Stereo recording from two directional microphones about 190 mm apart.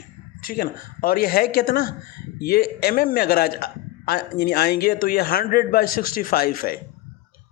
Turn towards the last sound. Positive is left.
turn(degrees=50)  # may be behind; listen again after turning